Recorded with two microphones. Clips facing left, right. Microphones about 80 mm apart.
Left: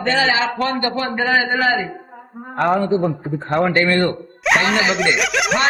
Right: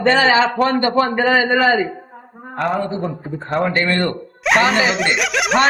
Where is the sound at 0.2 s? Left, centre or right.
Right.